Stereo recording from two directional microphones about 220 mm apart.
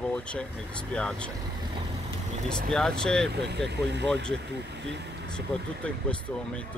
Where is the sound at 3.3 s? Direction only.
50° right (ahead or behind).